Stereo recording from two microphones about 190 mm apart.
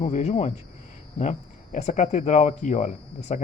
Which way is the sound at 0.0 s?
35° left (ahead or behind).